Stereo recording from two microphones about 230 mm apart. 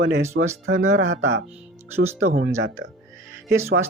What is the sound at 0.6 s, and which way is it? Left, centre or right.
Speech, right.